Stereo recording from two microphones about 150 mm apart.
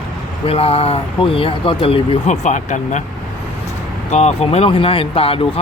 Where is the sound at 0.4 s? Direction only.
40° left (ahead or behind).